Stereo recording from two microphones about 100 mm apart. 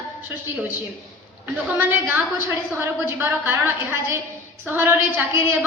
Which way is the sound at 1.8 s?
20° right (ahead or behind).